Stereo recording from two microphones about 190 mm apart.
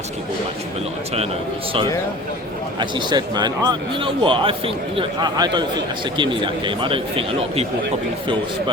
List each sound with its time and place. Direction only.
2.7 s a man's voice: 25° right (ahead or behind)